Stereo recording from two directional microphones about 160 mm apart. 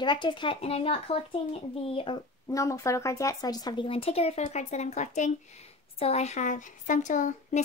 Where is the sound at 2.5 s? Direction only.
20° left (ahead or behind).